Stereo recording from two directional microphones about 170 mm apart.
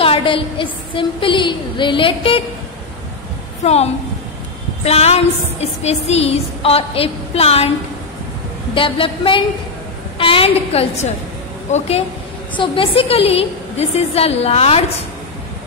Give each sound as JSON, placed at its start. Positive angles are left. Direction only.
{"t": 0.0, "sound": "a woman's voice", "side_deg": 30}
{"t": 3.6, "sound": "a woman's voice", "side_deg": 40}
{"t": 8.7, "sound": "a woman's voice", "side_deg": 30}
{"t": 12.5, "sound": "a woman's voice", "side_deg": 30}